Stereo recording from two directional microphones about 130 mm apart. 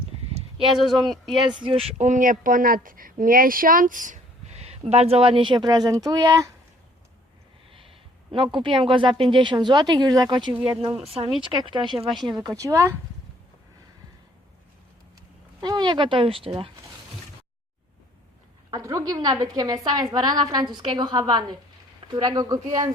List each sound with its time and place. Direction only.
0.8 s speech: centre (ahead or behind)
1.5 s a woman's voice: 40° right (ahead or behind)
2.0 s a woman's voice: 75° right (ahead or behind); by 6.5 s 25° right (ahead or behind)
7.7 s a sound: 45° right (ahead or behind)
8.5 s a woman's voice: 40° right (ahead or behind)
10.8 s a woman's voice: 50° right (ahead or behind)
11.3 s a woman's voice: 40° right (ahead or behind); by 13.0 s 20° right (ahead or behind)
15.6 s a woman's voice: 35° right (ahead or behind)
18.7 s a woman's voice: 25° right (ahead or behind)